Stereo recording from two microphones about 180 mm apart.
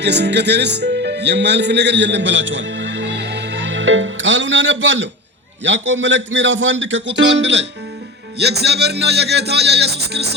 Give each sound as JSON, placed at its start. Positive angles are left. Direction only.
{"t": 0.0, "sound": "a man's voice", "side_deg": -70}
{"t": 8.4, "sound": "speech", "side_deg": -65}